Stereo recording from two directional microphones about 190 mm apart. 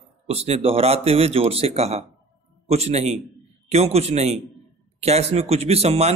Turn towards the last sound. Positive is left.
turn(degrees=-35)  # may be behind; listen again after turning